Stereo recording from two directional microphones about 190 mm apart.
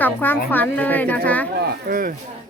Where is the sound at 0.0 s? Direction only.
10° left (ahead or behind).